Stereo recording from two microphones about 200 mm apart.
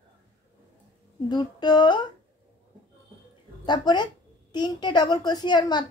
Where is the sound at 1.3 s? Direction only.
20° left (ahead or behind).